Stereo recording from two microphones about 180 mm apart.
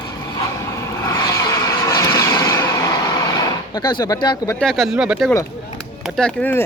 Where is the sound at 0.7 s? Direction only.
15° left (ahead or behind).